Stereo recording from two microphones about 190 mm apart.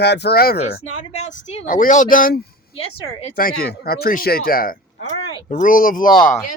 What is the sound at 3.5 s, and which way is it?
Speech, 55° left (ahead or behind).